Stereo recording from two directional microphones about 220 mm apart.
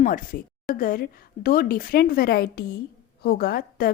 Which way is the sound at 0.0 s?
40° left (ahead or behind).